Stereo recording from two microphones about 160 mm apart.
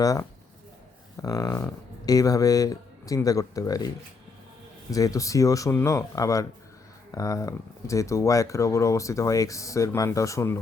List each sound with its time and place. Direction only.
0.0 s speech: 20° left (ahead or behind)